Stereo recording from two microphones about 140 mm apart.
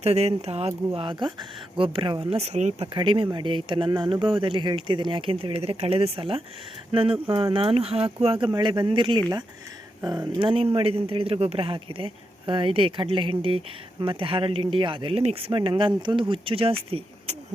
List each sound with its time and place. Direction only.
0.0 s speech: 50° right (ahead or behind)
0.9 s speech: 35° right (ahead or behind)
2.3 s speech: 50° right (ahead or behind)
2.8 s speech: 35° right (ahead or behind)